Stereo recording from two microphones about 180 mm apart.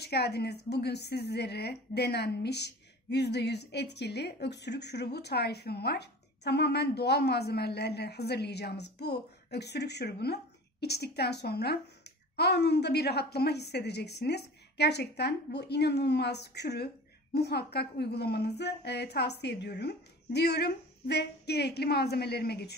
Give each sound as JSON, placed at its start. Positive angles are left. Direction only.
{"t": 0.0, "sound": "a woman's voice", "side_deg": 65}